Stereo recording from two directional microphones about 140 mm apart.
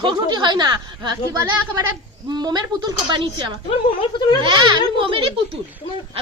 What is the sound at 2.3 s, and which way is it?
Speech, 30° right (ahead or behind).